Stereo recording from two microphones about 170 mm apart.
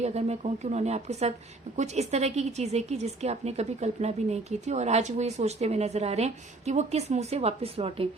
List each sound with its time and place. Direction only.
0.0 s a woman's voice: 40° right (ahead or behind)